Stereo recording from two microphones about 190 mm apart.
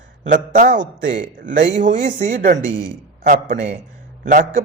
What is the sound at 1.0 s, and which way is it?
Speech, 70° right (ahead or behind).